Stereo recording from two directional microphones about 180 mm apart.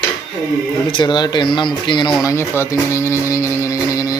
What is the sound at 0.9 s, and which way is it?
Speech, 25° left (ahead or behind).